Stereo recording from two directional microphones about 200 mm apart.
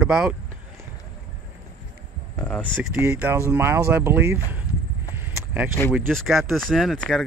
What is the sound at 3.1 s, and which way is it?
Speech, 10° right (ahead or behind).